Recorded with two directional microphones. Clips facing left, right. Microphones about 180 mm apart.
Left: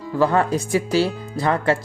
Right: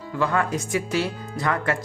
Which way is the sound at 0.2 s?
30° left (ahead or behind).